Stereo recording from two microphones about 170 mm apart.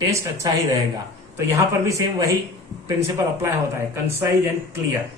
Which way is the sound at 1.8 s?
20° right (ahead or behind).